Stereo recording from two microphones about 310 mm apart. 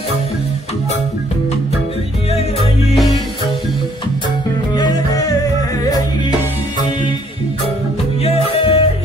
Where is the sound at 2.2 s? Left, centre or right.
Centre.